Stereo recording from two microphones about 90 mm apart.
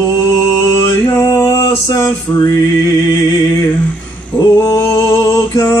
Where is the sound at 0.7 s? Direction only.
35° left (ahead or behind).